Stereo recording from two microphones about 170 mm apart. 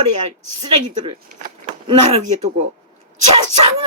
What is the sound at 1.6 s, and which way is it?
Speech, 40° right (ahead or behind).